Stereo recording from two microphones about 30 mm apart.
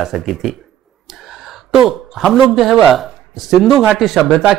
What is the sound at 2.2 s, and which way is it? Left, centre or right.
Speech, centre.